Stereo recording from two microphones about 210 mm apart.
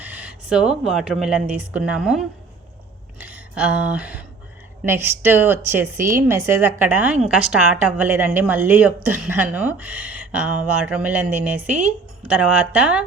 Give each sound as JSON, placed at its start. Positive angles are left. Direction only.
{"t": 0.0, "sound": "a woman's voice", "side_deg": -5}